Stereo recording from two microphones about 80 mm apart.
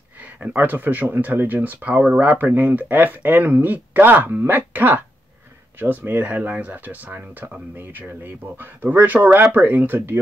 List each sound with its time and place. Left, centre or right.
0.2 s speech: centre